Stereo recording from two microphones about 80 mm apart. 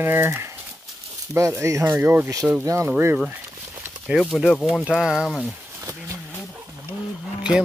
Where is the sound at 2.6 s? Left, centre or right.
Right.